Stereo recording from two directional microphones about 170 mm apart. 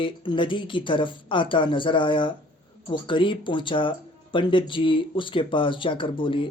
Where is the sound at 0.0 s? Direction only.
30° left (ahead or behind).